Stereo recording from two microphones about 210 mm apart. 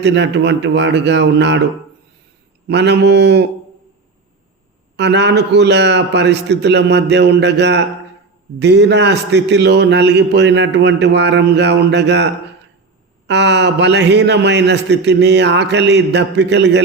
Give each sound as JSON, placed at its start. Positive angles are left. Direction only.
{"t": 0.0, "sound": "a man's voice", "side_deg": -60}
{"t": 2.6, "sound": "speech", "side_deg": -55}
{"t": 4.9, "sound": "a man's voice", "side_deg": -55}